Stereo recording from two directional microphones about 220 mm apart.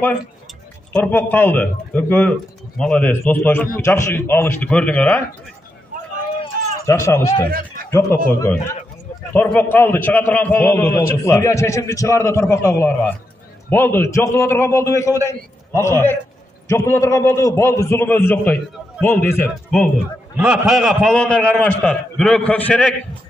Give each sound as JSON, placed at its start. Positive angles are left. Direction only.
{"t": 0.9, "sound": "a man's voice", "side_deg": 5}
{"t": 6.4, "sound": "run", "side_deg": 15}
{"t": 7.4, "sound": "a sound", "side_deg": -40}
{"t": 8.3, "sound": "a man's voice", "side_deg": 10}